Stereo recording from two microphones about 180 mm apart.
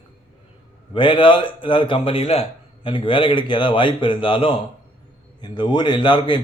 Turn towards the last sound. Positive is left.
turn(degrees=25)  # may be behind; listen again after turning